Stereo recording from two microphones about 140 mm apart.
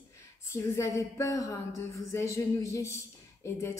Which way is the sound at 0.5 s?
20° left (ahead or behind).